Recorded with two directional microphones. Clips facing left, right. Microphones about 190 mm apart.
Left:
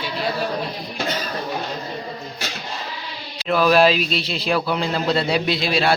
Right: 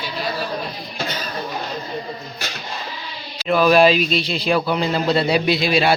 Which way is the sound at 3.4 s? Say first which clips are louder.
Right 2 dB; centre (ahead or behind).